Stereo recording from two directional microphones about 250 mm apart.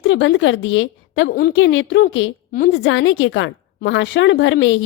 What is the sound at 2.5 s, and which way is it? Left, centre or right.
Speech, left.